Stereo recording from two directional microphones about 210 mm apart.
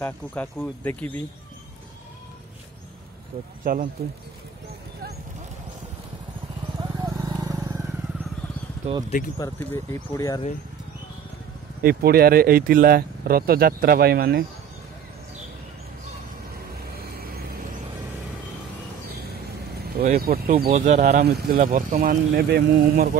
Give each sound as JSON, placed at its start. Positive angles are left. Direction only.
{"t": 0.0, "sound": "speech", "side_deg": 10}
{"t": 3.6, "sound": "speech", "side_deg": -40}
{"t": 6.8, "sound": "vehicle", "side_deg": -20}
{"t": 8.9, "sound": "speech", "side_deg": -30}
{"t": 9.4, "sound": "speech", "side_deg": 10}
{"t": 11.8, "sound": "speech", "side_deg": -45}
{"t": 17.1, "sound": "vehicle", "side_deg": -45}
{"t": 20.2, "sound": "speech", "side_deg": -45}
{"t": 20.7, "sound": "speech", "side_deg": -35}